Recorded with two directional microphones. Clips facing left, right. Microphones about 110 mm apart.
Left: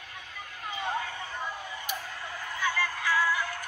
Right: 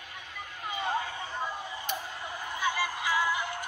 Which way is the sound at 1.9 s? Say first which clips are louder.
Right 1 dB; 20° right (ahead or behind).